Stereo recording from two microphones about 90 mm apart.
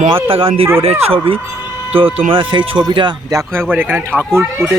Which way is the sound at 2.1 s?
75° right (ahead or behind).